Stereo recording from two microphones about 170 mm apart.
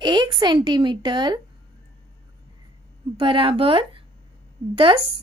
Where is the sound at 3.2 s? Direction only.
30° right (ahead or behind).